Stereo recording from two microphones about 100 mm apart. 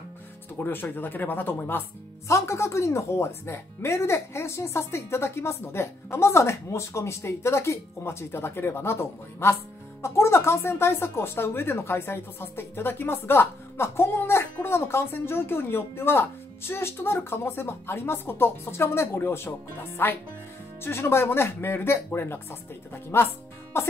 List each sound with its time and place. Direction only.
0.6 s speech: 20° left (ahead or behind)